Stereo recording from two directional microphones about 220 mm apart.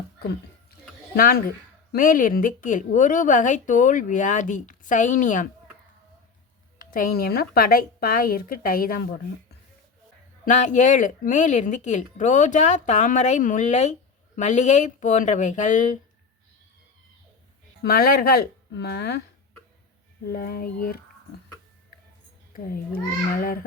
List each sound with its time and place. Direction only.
1.1 s speech: 45° left (ahead or behind)
6.9 s speech: 40° left (ahead or behind)
10.4 s speech: 35° left (ahead or behind)
17.8 s speech: 45° left (ahead or behind)
20.3 s speech: 45° left (ahead or behind)
22.5 s speech: 40° left (ahead or behind)